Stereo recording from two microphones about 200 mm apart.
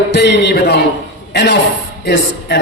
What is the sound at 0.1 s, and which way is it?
A man's voice, 60° left (ahead or behind).